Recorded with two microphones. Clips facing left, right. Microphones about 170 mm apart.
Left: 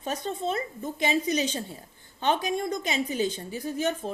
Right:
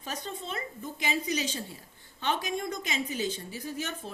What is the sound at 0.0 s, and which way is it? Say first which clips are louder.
Speech: left 8 dB; 35° left (ahead or behind).